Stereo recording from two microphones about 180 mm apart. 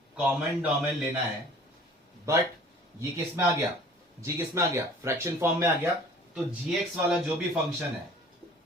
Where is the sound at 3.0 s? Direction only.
15° right (ahead or behind).